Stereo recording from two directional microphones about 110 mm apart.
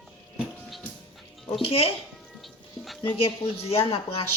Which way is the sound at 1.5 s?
55° left (ahead or behind).